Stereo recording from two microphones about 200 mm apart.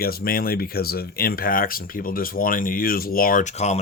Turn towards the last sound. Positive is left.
turn(degrees=35)  # may be behind; listen again after turning